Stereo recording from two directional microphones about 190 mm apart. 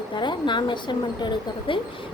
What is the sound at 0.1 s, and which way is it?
A woman's voice, 25° left (ahead or behind).